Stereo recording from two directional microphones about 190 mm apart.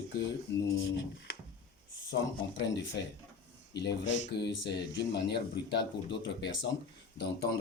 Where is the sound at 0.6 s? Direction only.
75° left (ahead or behind).